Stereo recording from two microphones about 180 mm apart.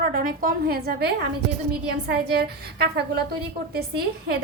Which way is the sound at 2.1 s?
65° right (ahead or behind).